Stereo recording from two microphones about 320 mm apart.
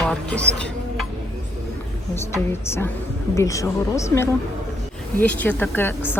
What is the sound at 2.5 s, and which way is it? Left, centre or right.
A woman's voice, centre.